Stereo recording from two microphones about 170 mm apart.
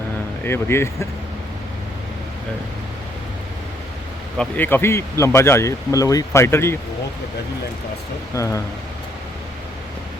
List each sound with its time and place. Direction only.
0.4 s speech: 15° left (ahead or behind)
4.4 s speech: 10° left (ahead or behind)
8.4 s speech: 20° left (ahead or behind)